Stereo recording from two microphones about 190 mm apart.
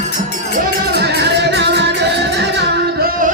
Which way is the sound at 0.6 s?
55° right (ahead or behind).